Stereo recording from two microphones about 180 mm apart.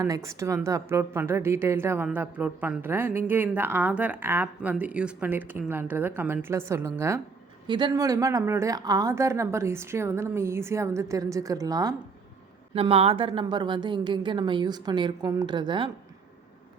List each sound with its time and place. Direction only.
0.0 s a woman's voice: 15° right (ahead or behind)
7.7 s a woman's voice: 25° right (ahead or behind)
12.7 s a woman's voice: 35° right (ahead or behind)